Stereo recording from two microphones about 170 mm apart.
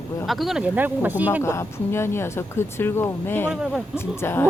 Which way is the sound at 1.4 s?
15° left (ahead or behind).